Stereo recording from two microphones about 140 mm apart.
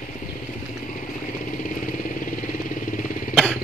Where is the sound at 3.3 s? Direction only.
5° left (ahead or behind).